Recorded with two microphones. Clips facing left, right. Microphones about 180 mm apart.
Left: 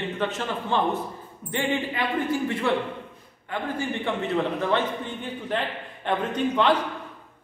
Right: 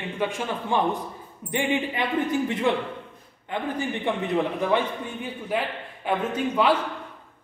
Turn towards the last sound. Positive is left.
turn(degrees=-5)  # may be behind; listen again after turning